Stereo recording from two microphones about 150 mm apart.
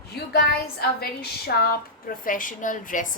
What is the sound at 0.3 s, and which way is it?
A woman's voice, 90° left.